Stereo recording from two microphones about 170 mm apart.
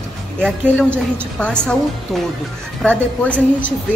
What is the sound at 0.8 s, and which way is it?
A woman's voice, 5° left (ahead or behind).